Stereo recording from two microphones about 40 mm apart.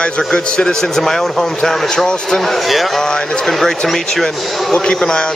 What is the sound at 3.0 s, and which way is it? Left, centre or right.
A man's voice, centre.